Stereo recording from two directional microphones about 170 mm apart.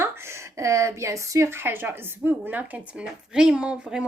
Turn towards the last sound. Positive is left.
turn(degrees=-5)  # may be behind; listen again after turning